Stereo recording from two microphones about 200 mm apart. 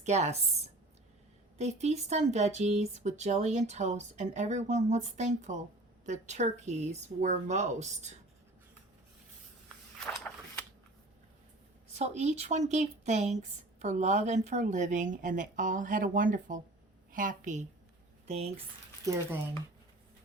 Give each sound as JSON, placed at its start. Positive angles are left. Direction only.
{"t": 0.0, "sound": "speech", "side_deg": -35}
{"t": 1.5, "sound": "speech", "side_deg": -35}
{"t": 10.1, "sound": "a sound", "side_deg": 5}
{"t": 11.9, "sound": "a woman's voice", "side_deg": -35}
{"t": 19.0, "sound": "speech", "side_deg": -15}